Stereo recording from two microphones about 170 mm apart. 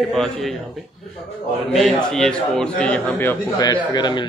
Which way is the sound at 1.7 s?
Centre (ahead or behind).